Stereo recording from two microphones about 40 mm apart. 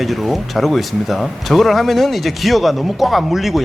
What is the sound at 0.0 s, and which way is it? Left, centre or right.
Speech, centre.